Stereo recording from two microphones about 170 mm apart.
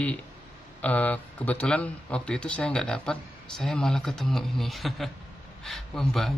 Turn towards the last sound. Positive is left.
turn(degrees=0)  # may be behind; listen again after turning